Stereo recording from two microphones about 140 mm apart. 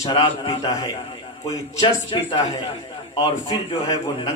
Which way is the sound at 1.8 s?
40° left (ahead or behind).